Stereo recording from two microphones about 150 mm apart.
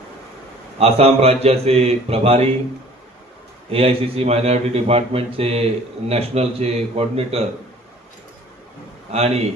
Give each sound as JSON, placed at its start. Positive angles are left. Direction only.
{"t": 0.8, "sound": "a man's voice", "side_deg": -40}
{"t": 3.7, "sound": "a man's voice", "side_deg": -40}
{"t": 9.1, "sound": "a man's voice", "side_deg": -45}